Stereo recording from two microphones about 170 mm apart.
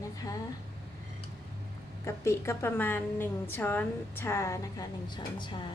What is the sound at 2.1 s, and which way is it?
A woman's voice, 15° left (ahead or behind).